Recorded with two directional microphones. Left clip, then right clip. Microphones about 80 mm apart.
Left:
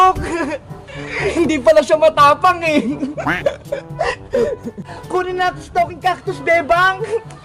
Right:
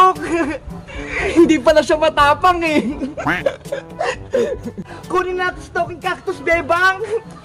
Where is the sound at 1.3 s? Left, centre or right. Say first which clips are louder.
Right 1 dB; right.